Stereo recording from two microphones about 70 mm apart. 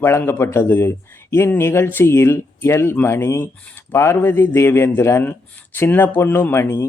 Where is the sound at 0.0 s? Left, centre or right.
Left.